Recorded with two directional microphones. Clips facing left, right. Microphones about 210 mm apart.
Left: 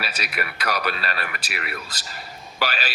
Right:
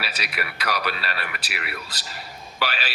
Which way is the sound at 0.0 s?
45° left (ahead or behind).